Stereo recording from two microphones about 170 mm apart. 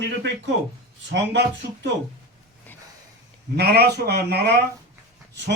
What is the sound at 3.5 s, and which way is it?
A man's voice, 70° right (ahead or behind).